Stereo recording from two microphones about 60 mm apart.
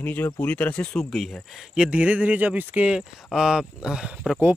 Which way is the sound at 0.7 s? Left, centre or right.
Centre.